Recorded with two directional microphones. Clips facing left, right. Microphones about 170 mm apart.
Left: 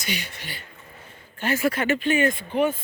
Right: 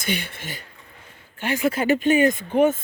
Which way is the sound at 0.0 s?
55° right (ahead or behind).